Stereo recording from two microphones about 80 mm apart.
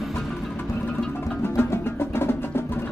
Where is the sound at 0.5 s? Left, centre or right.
Left.